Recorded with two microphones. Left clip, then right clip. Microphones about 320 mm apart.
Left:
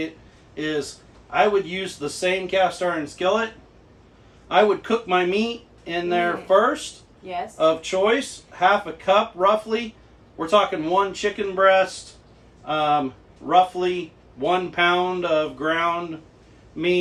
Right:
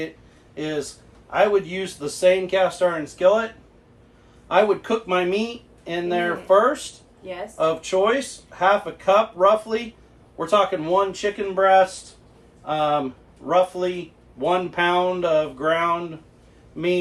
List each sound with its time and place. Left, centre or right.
0.5 s speech: centre
4.4 s a man's voice: centre